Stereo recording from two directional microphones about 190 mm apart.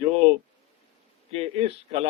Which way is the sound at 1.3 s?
30° right (ahead or behind).